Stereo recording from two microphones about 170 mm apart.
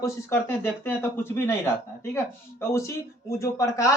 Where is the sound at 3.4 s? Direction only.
20° left (ahead or behind).